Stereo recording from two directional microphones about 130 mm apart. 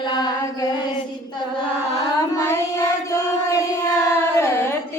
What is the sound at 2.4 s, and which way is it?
Child singing, 20° left (ahead or behind).